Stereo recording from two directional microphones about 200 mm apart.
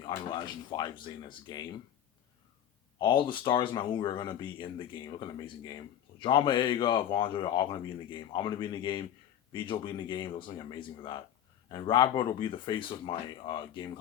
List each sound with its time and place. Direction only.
0.0 s speech: 20° left (ahead or behind)
3.0 s speech: 25° left (ahead or behind)